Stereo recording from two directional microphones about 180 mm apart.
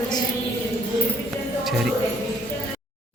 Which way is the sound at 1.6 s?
Centre (ahead or behind).